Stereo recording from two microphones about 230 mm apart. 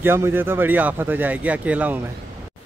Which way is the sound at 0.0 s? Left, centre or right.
Centre.